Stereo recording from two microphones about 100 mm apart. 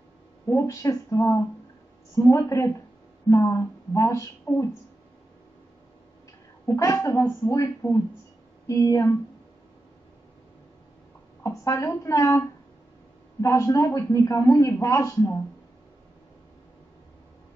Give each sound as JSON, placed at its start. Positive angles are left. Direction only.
{"t": 0.5, "sound": "a man's voice", "side_deg": 30}
{"t": 6.6, "sound": "a man's voice", "side_deg": 30}
{"t": 11.4, "sound": "a man's voice", "side_deg": 30}